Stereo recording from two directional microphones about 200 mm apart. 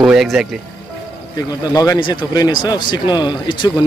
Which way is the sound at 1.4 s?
20° left (ahead or behind).